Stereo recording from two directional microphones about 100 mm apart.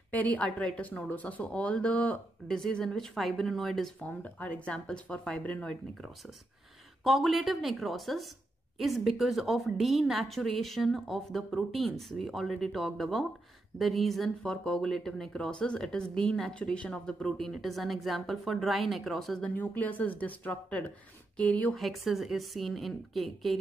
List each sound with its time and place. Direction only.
0.1 s speech: 15° left (ahead or behind)
4.0 s speech: 15° left (ahead or behind)
7.0 s a woman's voice: centre (ahead or behind)
19.5 s speech: 15° left (ahead or behind)
21.7 s a woman's voice: centre (ahead or behind)